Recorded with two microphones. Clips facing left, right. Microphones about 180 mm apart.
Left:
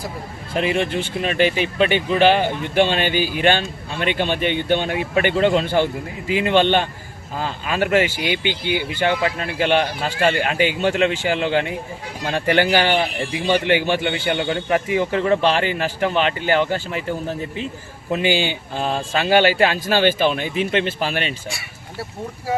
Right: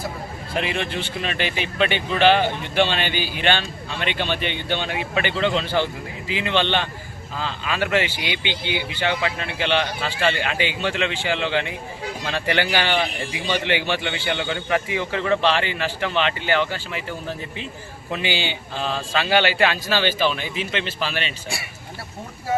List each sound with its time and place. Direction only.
0.5 s speech: 45° left (ahead or behind)